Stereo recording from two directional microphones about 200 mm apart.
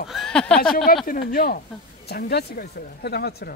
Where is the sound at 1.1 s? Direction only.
45° left (ahead or behind).